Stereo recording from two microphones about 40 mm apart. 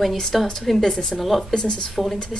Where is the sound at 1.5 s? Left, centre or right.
Centre.